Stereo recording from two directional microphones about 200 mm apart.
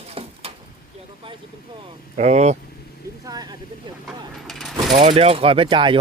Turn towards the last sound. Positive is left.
turn(degrees=-25)  # may be behind; listen again after turning